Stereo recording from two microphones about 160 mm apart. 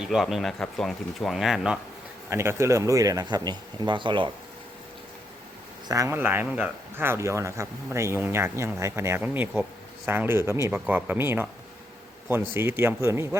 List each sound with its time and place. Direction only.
0.0 s speech: 5° right (ahead or behind)
2.3 s speech: 15° right (ahead or behind)
5.9 s speech: 15° right (ahead or behind)